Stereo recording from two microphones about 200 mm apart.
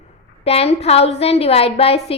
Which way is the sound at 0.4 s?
30° left (ahead or behind).